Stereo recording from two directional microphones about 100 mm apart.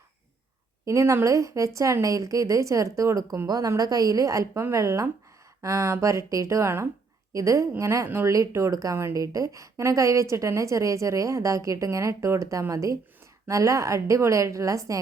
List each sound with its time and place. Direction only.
0.9 s speech: 30° right (ahead or behind)